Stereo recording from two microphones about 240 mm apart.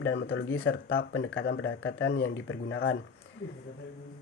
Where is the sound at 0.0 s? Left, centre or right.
Left.